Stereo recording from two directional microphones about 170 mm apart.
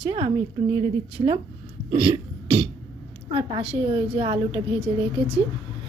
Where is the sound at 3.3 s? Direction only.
35° right (ahead or behind).